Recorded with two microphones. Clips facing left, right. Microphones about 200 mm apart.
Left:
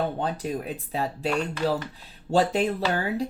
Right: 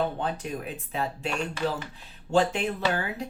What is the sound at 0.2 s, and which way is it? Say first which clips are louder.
Speech: left 3 dB; 35° left (ahead or behind).